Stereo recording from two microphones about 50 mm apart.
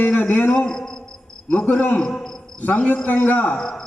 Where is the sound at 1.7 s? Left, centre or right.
Left.